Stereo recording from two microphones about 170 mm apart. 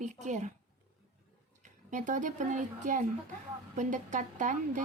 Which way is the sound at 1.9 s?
45° right (ahead or behind).